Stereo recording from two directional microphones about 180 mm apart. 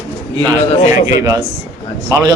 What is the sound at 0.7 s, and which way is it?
Speech, 40° left (ahead or behind).